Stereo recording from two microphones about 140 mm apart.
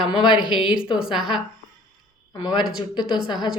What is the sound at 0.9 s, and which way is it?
Speech, 5° right (ahead or behind).